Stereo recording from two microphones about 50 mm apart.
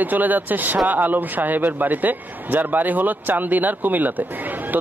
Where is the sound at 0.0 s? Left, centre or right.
Right.